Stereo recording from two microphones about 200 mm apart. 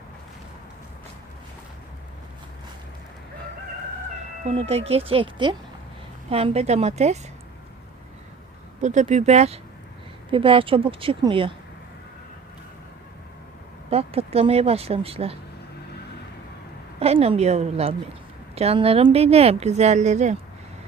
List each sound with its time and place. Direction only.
4.4 s speech: 30° right (ahead or behind)
8.8 s speech: 35° right (ahead or behind)
13.9 s speech: 30° right (ahead or behind)
17.0 s speech: 30° right (ahead or behind)